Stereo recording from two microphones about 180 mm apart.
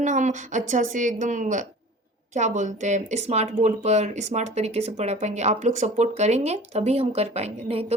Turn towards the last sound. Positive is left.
turn(degrees=-35)  # may be behind; listen again after turning